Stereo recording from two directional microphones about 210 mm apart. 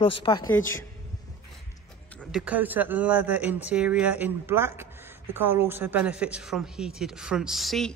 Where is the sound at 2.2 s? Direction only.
5° right (ahead or behind).